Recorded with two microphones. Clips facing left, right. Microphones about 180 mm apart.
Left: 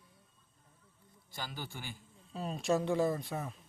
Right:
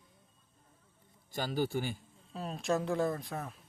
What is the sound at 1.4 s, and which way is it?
Speech, 45° right (ahead or behind).